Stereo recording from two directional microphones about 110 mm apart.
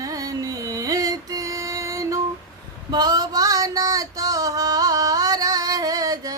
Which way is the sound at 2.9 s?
40° right (ahead or behind).